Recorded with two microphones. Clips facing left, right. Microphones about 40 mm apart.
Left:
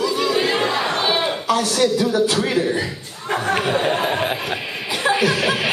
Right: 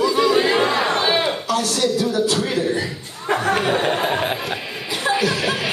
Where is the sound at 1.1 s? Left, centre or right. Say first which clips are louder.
Right 1 dB; centre.